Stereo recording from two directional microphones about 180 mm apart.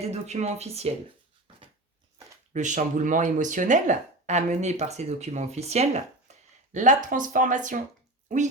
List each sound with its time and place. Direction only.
0.0 s speech: 35° right (ahead or behind)
2.5 s speech: 45° right (ahead or behind)